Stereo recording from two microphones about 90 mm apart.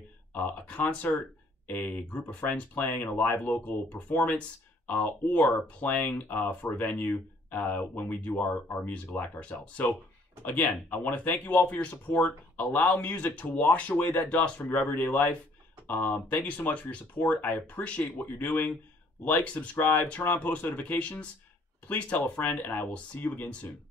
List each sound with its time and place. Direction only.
0.3 s speech: 20° left (ahead or behind)